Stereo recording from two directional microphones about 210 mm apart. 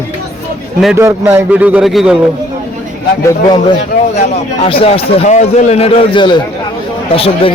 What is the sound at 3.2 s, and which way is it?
A man's voice, 20° left (ahead or behind).